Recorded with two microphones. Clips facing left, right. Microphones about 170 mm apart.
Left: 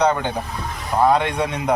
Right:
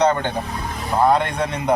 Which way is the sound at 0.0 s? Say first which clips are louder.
Right 1 dB; 10° left (ahead or behind).